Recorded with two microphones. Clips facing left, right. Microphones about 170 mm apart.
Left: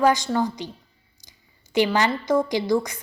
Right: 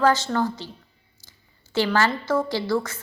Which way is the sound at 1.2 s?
15° left (ahead or behind).